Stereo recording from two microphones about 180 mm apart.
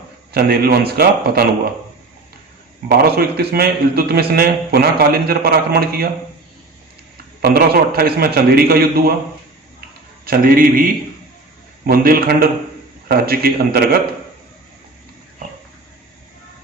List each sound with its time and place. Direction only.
0.3 s a man's voice: 55° right (ahead or behind)
3.0 s a man's voice: 60° right (ahead or behind)
7.4 s a man's voice: 55° right (ahead or behind)
10.2 s a man's voice: 50° right (ahead or behind)